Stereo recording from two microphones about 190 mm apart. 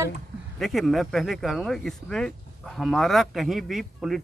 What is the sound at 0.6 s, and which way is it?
Speech, centre (ahead or behind).